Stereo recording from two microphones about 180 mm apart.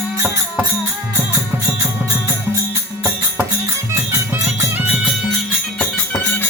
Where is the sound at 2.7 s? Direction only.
10° right (ahead or behind).